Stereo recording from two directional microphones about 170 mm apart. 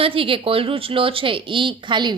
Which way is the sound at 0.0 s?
30° right (ahead or behind).